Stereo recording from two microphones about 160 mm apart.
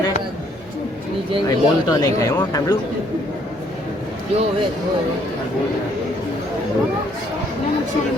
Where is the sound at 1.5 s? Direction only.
20° left (ahead or behind).